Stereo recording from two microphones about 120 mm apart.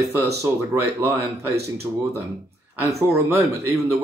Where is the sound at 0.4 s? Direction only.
25° right (ahead or behind).